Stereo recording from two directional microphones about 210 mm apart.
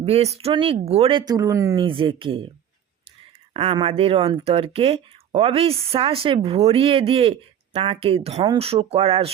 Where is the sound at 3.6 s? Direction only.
30° right (ahead or behind).